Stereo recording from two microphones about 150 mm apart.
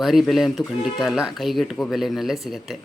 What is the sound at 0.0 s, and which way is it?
Speech, centre (ahead or behind).